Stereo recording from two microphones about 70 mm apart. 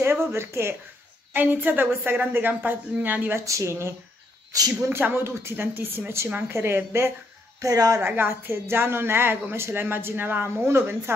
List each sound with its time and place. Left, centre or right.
0.0 s speech: right
1.3 s a woman's voice: right
3.3 s speech: right
4.5 s a woman's voice: right
5.0 s speech: right
7.6 s speech: right
8.0 s speech: right